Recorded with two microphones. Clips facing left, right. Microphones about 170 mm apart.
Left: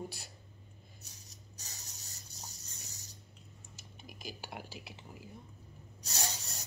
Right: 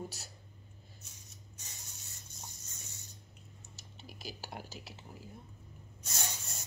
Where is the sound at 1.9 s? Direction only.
35° left (ahead or behind).